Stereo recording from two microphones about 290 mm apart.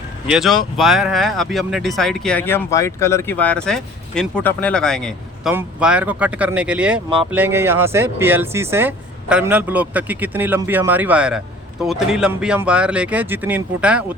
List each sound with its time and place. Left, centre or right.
0.3 s speech: centre